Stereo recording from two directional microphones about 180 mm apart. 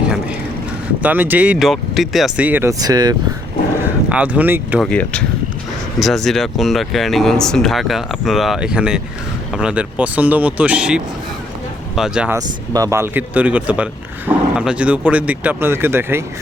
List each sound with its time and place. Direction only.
0.0 s vehicle: 5° right (ahead or behind)
1.0 s speech: 10° right (ahead or behind)
3.8 s speech: 10° right (ahead or behind)
4.8 s speech: 5° left (ahead or behind)
12.4 s speech: 20° right (ahead or behind)